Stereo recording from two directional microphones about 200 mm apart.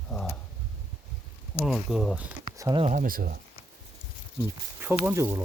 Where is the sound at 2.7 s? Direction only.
25° right (ahead or behind).